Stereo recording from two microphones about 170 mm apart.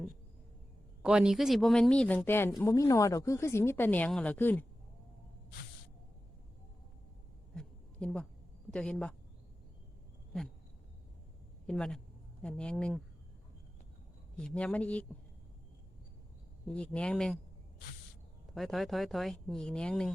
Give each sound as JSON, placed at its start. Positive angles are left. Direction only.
{"t": 1.0, "sound": "speech", "side_deg": -5}
{"t": 7.5, "sound": "a sound", "side_deg": 5}
{"t": 8.7, "sound": "speech", "side_deg": 5}
{"t": 11.6, "sound": "speech", "side_deg": 5}
{"t": 14.3, "sound": "speech", "side_deg": 5}
{"t": 16.6, "sound": "speech", "side_deg": 5}
{"t": 18.5, "sound": "speech", "side_deg": 0}